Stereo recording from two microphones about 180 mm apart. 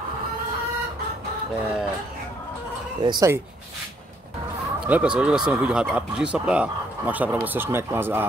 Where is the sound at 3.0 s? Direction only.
20° right (ahead or behind).